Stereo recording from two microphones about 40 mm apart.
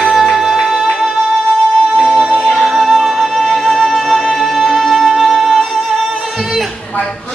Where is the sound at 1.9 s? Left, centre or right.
Right.